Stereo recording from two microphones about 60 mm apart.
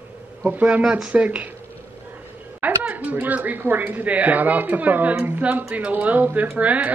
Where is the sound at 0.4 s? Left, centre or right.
Right.